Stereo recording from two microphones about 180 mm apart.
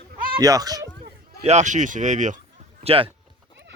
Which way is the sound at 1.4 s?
40° right (ahead or behind).